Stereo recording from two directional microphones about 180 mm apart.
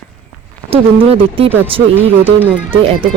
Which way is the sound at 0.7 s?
30° right (ahead or behind).